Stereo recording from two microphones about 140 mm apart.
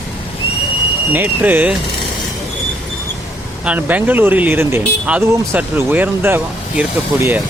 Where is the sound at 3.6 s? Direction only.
10° right (ahead or behind).